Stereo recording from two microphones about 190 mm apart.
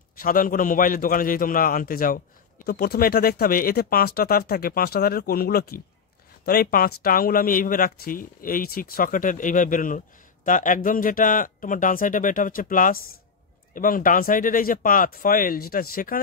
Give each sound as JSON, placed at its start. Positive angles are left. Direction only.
{"t": 0.2, "sound": "speech", "side_deg": 45}